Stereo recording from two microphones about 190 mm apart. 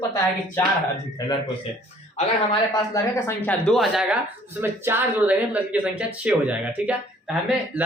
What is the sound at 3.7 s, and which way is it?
Speech, centre (ahead or behind).